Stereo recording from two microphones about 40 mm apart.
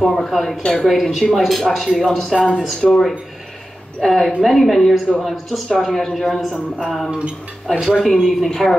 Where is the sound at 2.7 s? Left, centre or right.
Left.